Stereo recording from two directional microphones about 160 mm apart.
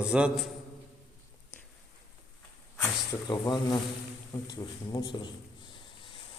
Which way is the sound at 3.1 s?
25° left (ahead or behind).